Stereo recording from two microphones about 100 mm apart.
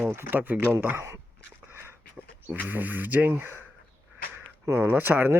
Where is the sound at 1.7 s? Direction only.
25° right (ahead or behind).